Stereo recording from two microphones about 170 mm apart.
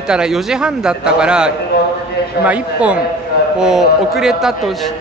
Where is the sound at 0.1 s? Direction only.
5° right (ahead or behind).